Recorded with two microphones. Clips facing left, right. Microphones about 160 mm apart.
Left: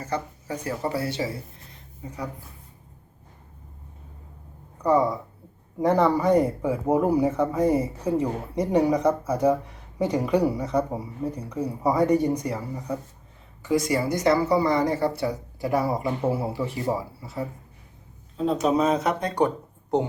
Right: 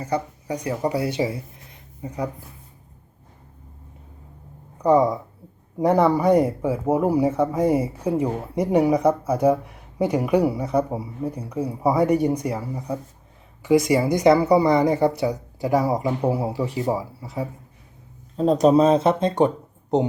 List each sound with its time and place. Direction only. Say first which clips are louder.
0.0 s speech: right 4 dB; 15° right (ahead or behind)
4.8 s speech: right 4 dB; 15° right (ahead or behind)
18.3 s speech: right 6 dB; 40° right (ahead or behind)